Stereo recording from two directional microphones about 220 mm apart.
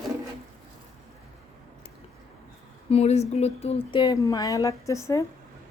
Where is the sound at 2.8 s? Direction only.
30° left (ahead or behind).